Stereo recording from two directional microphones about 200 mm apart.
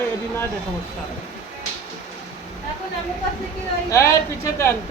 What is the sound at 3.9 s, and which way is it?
Speech, 15° left (ahead or behind).